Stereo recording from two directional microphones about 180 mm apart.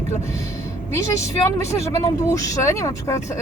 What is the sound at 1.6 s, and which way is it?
Speech, 15° left (ahead or behind).